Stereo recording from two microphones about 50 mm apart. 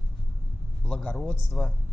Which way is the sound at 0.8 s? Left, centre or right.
Centre.